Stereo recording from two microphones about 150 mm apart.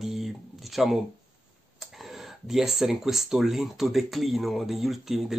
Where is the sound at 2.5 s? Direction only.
Centre (ahead or behind).